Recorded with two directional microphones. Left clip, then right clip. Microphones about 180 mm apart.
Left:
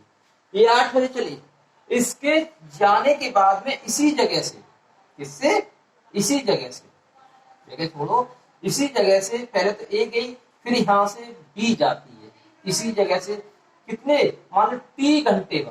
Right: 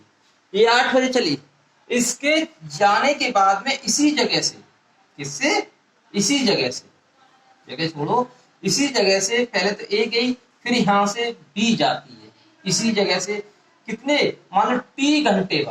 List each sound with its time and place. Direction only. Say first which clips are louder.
0.5 s a man's voice: even; 20° right (ahead or behind)